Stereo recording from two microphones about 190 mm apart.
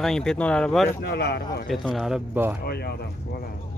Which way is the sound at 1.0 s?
55° left (ahead or behind).